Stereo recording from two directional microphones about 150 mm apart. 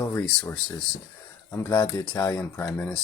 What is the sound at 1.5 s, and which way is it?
Speech, 15° left (ahead or behind).